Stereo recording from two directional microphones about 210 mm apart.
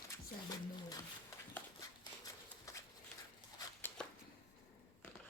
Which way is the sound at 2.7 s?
15° left (ahead or behind).